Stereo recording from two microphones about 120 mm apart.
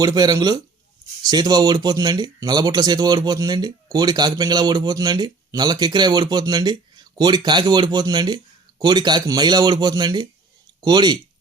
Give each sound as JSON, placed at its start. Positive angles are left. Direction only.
{"t": 0.0, "sound": "speech", "side_deg": -30}